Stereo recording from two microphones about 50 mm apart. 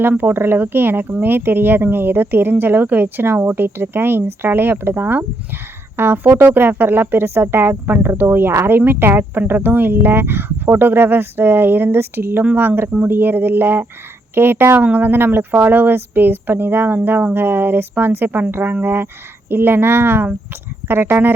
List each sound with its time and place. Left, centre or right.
0.2 s a woman's voice: right
7.3 s a woman's voice: right